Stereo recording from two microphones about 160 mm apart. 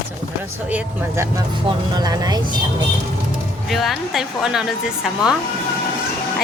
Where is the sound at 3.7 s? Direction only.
Centre (ahead or behind).